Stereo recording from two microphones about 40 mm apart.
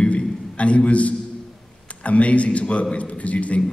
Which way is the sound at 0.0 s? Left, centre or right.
Left.